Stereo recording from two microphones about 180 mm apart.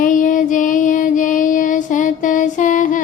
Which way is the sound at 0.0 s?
45° left (ahead or behind).